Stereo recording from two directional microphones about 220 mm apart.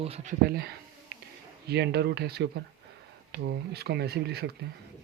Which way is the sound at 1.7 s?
45° right (ahead or behind).